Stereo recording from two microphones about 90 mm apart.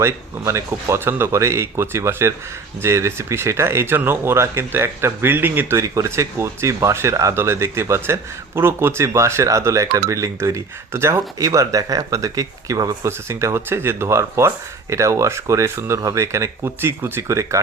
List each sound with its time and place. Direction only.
0.0 s speech: 30° right (ahead or behind)
5.8 s speech: 35° right (ahead or behind)